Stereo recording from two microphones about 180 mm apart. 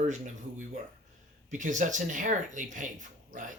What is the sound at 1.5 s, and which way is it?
Speech, 45° right (ahead or behind).